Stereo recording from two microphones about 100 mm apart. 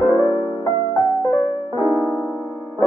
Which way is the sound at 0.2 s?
40° right (ahead or behind).